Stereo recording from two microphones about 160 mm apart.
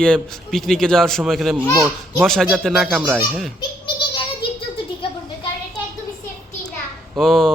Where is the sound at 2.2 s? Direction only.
5° left (ahead or behind).